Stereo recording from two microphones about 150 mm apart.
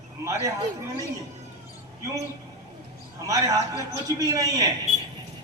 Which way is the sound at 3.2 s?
25° right (ahead or behind).